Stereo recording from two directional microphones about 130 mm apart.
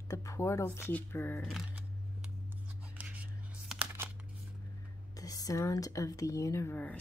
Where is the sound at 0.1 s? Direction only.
25° left (ahead or behind).